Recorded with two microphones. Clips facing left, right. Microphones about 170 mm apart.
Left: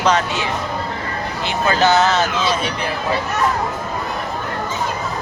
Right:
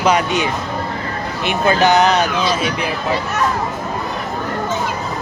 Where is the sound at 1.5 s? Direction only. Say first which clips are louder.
Right 2 dB; 15° right (ahead or behind).